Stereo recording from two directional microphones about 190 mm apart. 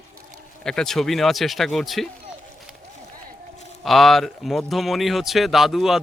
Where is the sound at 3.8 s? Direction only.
Centre (ahead or behind).